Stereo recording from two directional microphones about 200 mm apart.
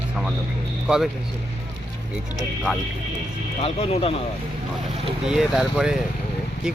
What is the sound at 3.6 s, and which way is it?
Speech, 30° left (ahead or behind).